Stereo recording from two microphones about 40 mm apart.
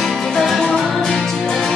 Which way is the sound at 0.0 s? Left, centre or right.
Centre.